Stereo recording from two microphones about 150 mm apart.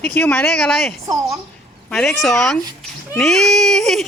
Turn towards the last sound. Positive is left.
turn(degrees=0)  # may be behind; listen again after turning